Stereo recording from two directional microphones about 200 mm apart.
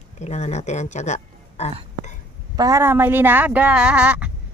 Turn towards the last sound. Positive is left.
turn(degrees=-5)  # may be behind; listen again after turning